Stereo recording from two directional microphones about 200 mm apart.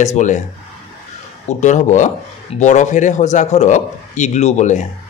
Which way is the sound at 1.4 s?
35° left (ahead or behind).